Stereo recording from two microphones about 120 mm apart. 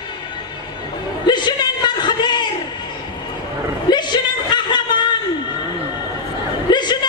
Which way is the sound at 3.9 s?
40° left (ahead or behind).